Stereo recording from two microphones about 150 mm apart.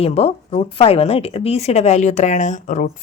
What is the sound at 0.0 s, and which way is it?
A woman's voice, 45° left (ahead or behind).